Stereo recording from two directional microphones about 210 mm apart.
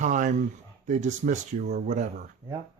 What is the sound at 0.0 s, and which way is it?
Speech, 35° right (ahead or behind).